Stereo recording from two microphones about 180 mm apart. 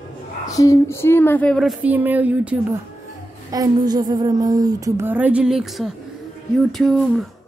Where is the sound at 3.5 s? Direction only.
20° right (ahead or behind); by 5.9 s centre (ahead or behind).